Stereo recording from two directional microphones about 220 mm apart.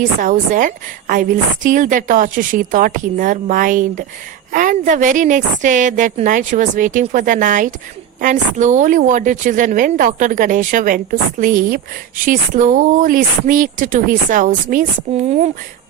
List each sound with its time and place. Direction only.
0.0 s a woman's voice: 35° right (ahead or behind)